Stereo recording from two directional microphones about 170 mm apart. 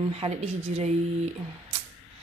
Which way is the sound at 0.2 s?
40° right (ahead or behind).